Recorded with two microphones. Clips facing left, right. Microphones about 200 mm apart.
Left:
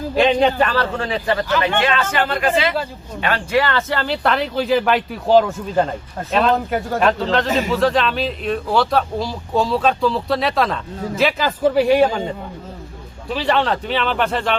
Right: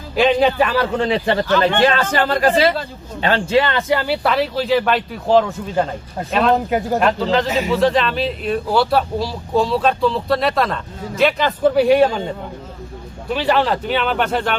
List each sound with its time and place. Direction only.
0.2 s a man's voice: 5° right (ahead or behind)
13.3 s speech: centre (ahead or behind)